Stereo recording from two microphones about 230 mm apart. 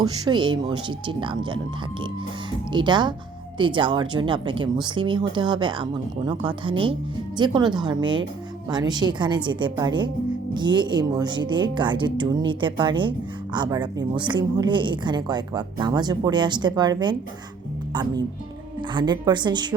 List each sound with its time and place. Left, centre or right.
0.0 s speech: centre
2.7 s speech: centre